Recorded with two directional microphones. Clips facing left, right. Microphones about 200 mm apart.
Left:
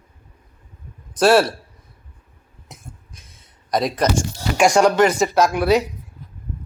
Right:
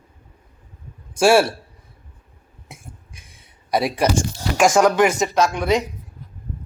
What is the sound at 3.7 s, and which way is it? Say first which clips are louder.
A man's voice: even; 5° right (ahead or behind).